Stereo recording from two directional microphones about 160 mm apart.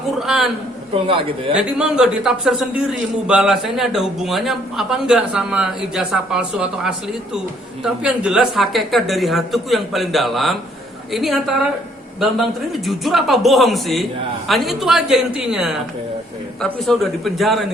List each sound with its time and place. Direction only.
0.2 s a man's voice: 5° right (ahead or behind)
0.9 s a man's voice: 35° right (ahead or behind)
1.5 s speech: 5° right (ahead or behind)